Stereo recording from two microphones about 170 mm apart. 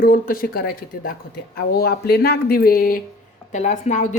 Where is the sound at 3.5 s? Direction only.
45° left (ahead or behind).